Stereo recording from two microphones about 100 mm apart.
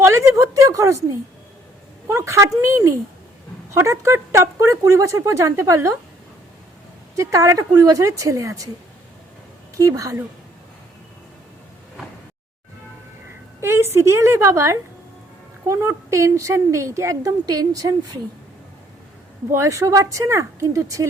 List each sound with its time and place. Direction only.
0.0 s a woman's voice: 30° right (ahead or behind)
2.0 s a woman's voice: 30° right (ahead or behind)
7.2 s a woman's voice: 30° right (ahead or behind)
9.7 s a woman's voice: 35° right (ahead or behind)
13.6 s a woman's voice: 25° right (ahead or behind)
19.5 s a woman's voice: 30° right (ahead or behind)